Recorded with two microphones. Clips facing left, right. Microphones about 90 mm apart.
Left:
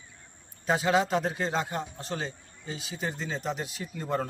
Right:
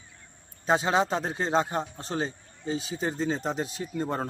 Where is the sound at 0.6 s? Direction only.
30° right (ahead or behind).